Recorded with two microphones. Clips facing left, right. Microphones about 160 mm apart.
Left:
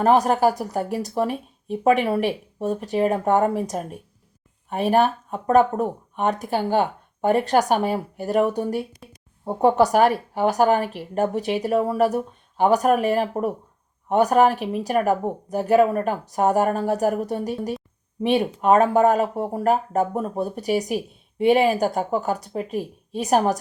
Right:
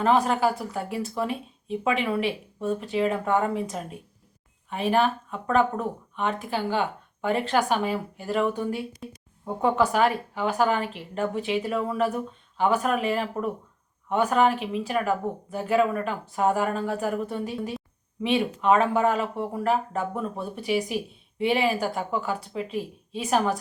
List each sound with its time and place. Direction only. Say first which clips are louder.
0.0 s speech: left 4 dB; 45° left (ahead or behind)